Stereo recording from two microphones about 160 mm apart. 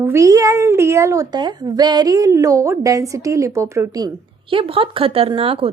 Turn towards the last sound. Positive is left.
turn(degrees=-35)  # may be behind; listen again after turning